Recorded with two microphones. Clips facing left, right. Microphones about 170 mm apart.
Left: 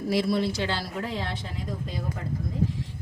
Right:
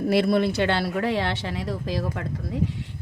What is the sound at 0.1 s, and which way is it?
Speech, 60° right (ahead or behind).